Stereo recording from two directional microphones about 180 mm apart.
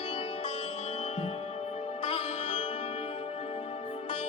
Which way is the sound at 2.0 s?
30° left (ahead or behind).